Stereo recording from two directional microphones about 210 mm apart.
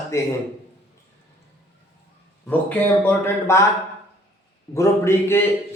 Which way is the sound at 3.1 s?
10° left (ahead or behind).